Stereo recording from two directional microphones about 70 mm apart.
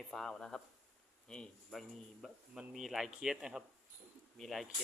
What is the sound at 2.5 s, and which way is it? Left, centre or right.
Speech, centre.